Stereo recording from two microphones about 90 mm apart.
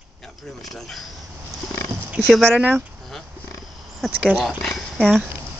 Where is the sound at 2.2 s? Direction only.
5° left (ahead or behind).